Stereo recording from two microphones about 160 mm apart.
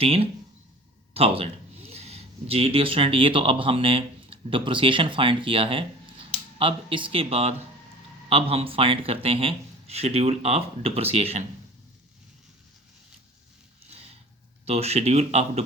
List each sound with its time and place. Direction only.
0.0 s speech: 35° right (ahead or behind)
14.6 s speech: 40° right (ahead or behind)